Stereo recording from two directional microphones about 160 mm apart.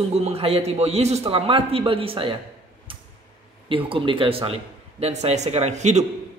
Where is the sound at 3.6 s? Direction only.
35° right (ahead or behind).